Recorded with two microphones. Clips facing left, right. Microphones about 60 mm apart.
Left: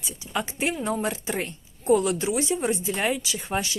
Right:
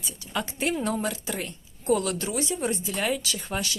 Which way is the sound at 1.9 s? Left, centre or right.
Centre.